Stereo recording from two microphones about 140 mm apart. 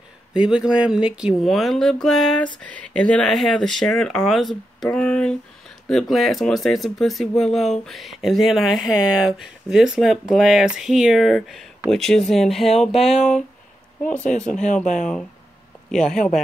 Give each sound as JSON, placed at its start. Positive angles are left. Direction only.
{"t": 0.3, "sound": "speech", "side_deg": -5}
{"t": 15.9, "sound": "speech", "side_deg": 5}